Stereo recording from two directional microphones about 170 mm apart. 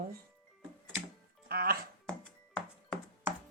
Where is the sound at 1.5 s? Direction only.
60° right (ahead or behind).